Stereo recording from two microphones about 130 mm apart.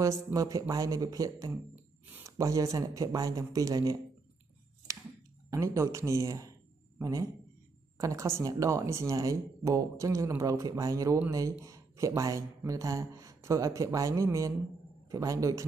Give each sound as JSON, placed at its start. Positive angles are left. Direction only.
{"t": 0.0, "sound": "speech", "side_deg": -25}
{"t": 2.0, "sound": "a sound", "side_deg": -15}
{"t": 2.3, "sound": "speech", "side_deg": -25}
{"t": 5.5, "sound": "a man's voice", "side_deg": -25}